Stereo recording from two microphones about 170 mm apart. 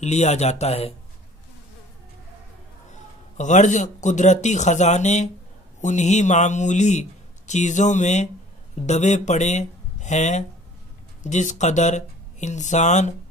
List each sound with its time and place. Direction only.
0.0 s speech: 40° left (ahead or behind)
2.9 s speech: 45° left (ahead or behind)